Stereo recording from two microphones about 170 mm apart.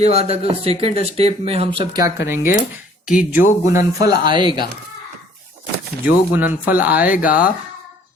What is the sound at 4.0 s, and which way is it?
Speech, 25° right (ahead or behind).